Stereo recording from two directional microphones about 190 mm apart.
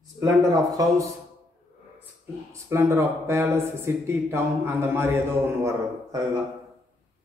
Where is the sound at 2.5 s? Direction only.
15° right (ahead or behind).